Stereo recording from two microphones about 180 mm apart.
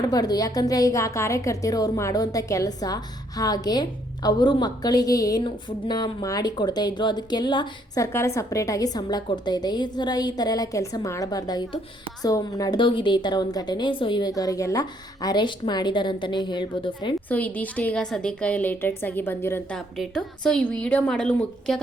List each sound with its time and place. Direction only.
0.1 s a woman's voice: 20° left (ahead or behind)
17.2 s a woman's voice: 10° left (ahead or behind)